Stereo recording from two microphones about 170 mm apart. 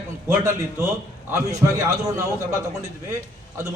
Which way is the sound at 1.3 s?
20° right (ahead or behind).